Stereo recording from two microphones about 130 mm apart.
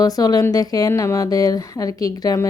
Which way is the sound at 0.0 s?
30° left (ahead or behind).